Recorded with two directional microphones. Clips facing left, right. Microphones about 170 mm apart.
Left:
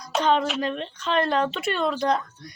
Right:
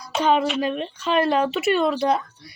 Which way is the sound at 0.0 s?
10° right (ahead or behind).